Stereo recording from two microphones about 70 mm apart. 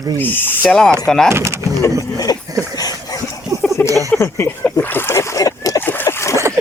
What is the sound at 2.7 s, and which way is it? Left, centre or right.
Dog, left.